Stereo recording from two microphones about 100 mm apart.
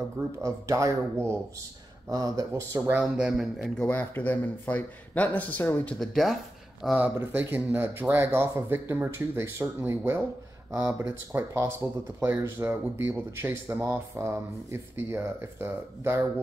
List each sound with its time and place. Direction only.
0.4 s speech: 30° right (ahead or behind)
2.9 s speech: 10° right (ahead or behind)
3.5 s speech: 5° left (ahead or behind)
3.9 s speech: 15° left (ahead or behind)
5.9 s speech: centre (ahead or behind)
7.2 s speech: 20° right (ahead or behind)